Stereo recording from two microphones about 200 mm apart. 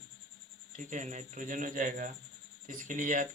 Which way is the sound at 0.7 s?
40° right (ahead or behind).